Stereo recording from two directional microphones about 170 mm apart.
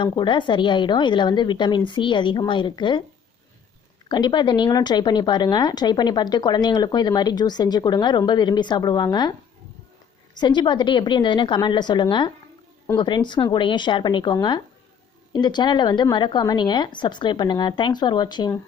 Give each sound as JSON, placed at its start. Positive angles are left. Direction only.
{"t": 0.0, "sound": "a woman's voice", "side_deg": 30}
{"t": 4.1, "sound": "a woman's voice", "side_deg": 25}
{"t": 10.3, "sound": "a woman's voice", "side_deg": 25}